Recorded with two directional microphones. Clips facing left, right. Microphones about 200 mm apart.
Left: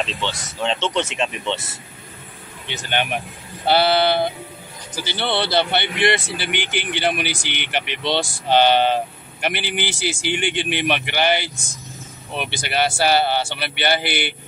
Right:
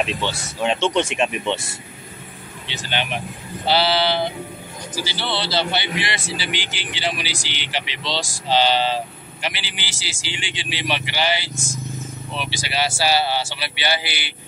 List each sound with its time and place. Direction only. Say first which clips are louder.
0.0 s speech: right 2 dB; 10° right (ahead or behind)
2.6 s sheep: left 3 dB; 50° left (ahead or behind)
5.0 s a man's voice: left 5 dB; 55° left (ahead or behind)